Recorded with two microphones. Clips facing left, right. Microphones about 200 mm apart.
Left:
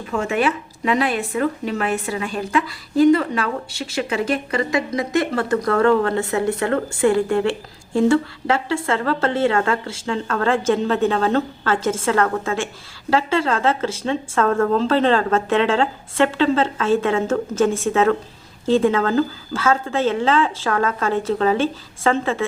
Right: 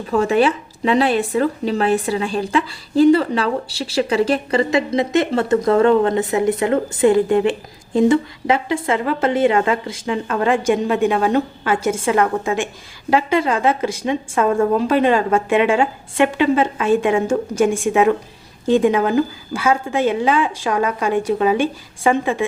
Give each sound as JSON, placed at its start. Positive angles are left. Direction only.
{"t": 0.1, "sound": "a woman's voice", "side_deg": -35}